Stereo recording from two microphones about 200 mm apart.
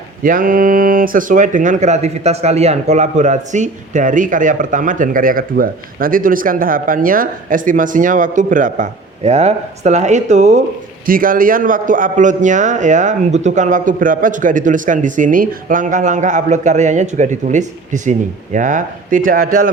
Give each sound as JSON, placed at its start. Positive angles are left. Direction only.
{"t": 0.2, "sound": "speech", "side_deg": -45}